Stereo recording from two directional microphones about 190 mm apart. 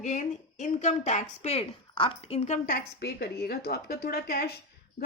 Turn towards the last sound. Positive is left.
turn(degrees=55)  # may be behind; listen again after turning